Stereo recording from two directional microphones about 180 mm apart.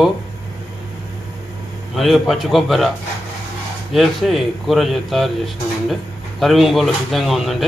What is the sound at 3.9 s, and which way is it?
Speech, centre (ahead or behind).